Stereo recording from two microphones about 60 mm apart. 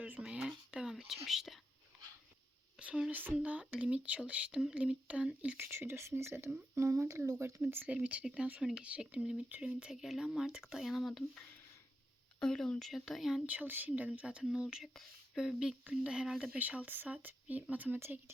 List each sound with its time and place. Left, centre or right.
0.2 s whispering: centre
0.9 s speech: centre
2.7 s speech: centre
3.1 s speech: right
3.3 s speech: centre
5.5 s speech: right
7.9 s speech: right
9.9 s speech: centre
12.4 s speech: centre
12.8 s speech: centre
13.4 s speech: right; by 15.7 s centre
15.9 s speech: centre
16.5 s speech: right